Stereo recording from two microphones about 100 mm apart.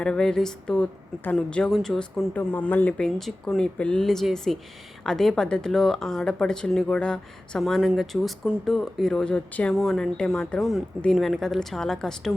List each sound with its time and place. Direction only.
0.0 s speech: 10° left (ahead or behind)
2.3 s speech: 15° left (ahead or behind)
3.2 s speech: centre (ahead or behind)
7.6 s speech: 5° right (ahead or behind); by 9.7 s 10° left (ahead or behind)
9.7 s speech: centre (ahead or behind)